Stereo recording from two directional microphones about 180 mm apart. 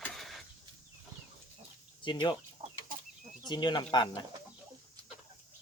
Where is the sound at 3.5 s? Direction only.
25° left (ahead or behind).